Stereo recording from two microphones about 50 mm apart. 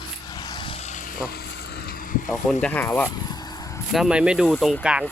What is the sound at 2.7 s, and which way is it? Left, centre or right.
Speech, left.